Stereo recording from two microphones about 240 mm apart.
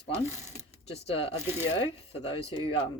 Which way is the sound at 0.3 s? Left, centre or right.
Centre.